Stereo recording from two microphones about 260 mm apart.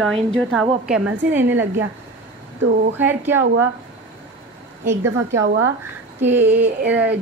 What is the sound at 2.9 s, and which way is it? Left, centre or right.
Speech, centre.